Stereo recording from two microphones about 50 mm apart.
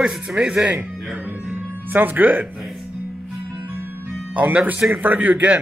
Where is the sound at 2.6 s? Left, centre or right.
Centre.